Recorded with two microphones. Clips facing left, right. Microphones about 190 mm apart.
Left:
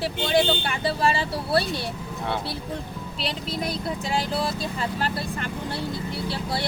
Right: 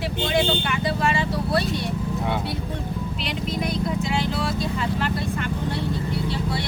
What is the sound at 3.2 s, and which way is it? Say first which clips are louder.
Speech: even; 35° left (ahead or behind).